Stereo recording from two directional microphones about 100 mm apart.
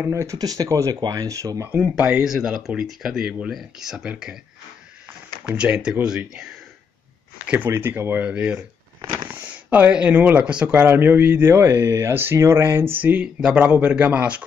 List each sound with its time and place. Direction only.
0.0 s speech: 30° right (ahead or behind)
1.8 s speech: 10° right (ahead or behind)
5.4 s speech: 10° right (ahead or behind)
7.4 s speech: 20° right (ahead or behind)
13.0 s speech: 10° right (ahead or behind)